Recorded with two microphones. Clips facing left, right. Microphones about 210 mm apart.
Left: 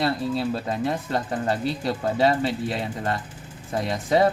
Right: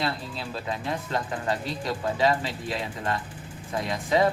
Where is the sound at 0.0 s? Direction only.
45° left (ahead or behind).